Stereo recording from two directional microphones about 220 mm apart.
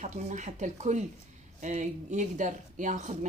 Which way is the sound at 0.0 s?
35° right (ahead or behind).